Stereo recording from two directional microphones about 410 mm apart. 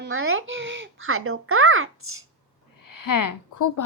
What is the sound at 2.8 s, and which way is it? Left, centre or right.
Speech, left.